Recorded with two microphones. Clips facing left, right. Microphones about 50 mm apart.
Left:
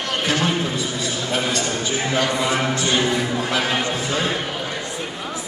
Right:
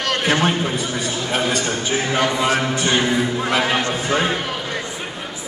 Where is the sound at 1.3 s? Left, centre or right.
Right.